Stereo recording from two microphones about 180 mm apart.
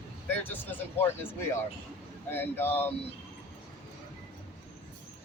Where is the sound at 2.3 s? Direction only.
10° left (ahead or behind).